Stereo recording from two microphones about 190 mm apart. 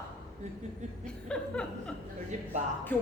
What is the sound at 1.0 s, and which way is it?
Chuckle, 5° left (ahead or behind).